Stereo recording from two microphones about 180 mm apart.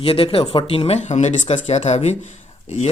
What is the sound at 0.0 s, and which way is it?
Speech, 30° left (ahead or behind).